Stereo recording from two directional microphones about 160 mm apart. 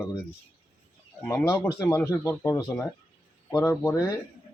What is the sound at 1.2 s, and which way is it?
Speech, 20° left (ahead or behind).